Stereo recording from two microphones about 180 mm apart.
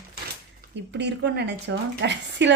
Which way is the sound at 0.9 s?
75° right (ahead or behind).